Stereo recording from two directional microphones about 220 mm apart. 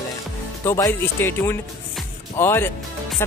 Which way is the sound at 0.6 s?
10° left (ahead or behind).